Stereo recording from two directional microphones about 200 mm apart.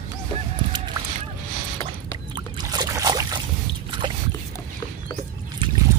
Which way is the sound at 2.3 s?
20° right (ahead or behind).